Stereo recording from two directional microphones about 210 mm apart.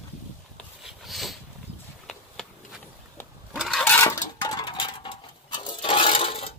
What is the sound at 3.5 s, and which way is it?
Sewing machine, centre (ahead or behind).